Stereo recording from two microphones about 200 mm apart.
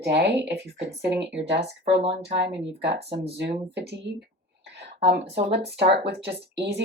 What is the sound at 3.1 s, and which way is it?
Speech, 30° right (ahead or behind).